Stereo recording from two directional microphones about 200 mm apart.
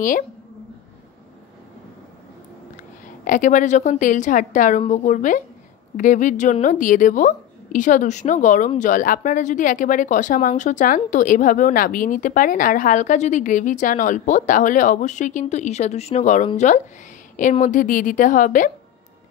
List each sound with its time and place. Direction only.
3.3 s a woman's voice: 40° left (ahead or behind)